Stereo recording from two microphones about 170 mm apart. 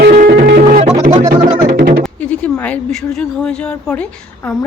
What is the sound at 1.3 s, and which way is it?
Music, 25° right (ahead or behind).